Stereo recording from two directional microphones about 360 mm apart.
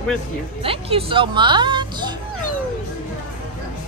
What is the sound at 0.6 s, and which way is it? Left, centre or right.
Speech, centre.